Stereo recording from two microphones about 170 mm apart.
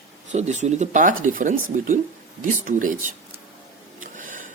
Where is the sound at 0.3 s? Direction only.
45° right (ahead or behind).